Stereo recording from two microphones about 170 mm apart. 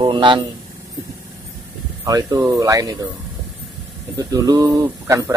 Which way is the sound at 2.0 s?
20° right (ahead or behind).